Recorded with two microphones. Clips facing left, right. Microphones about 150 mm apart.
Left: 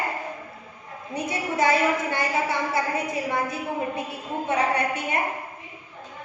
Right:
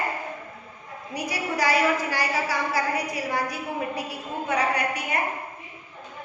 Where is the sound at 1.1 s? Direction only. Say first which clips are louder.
Left 2 dB; 25° left (ahead or behind).